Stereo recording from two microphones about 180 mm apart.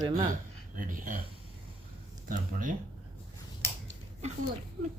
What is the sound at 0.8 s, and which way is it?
Speech, 50° right (ahead or behind).